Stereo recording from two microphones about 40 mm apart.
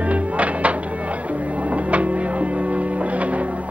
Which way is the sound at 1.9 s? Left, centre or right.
Right.